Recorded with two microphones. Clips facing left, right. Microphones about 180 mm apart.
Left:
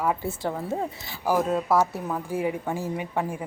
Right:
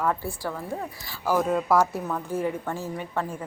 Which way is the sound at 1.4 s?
Centre (ahead or behind).